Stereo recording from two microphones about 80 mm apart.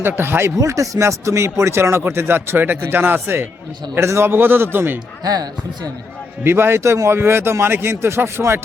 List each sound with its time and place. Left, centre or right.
0.2 s a man's voice: right
0.5 s a man's voice: right
5.2 s speech: right
6.4 s speech: right